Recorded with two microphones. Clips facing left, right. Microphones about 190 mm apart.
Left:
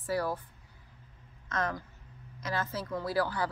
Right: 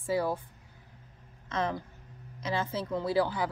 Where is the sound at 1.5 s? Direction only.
25° right (ahead or behind).